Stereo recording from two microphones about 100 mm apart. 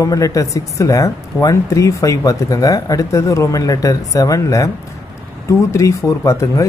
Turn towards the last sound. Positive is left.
turn(degrees=30)  # may be behind; listen again after turning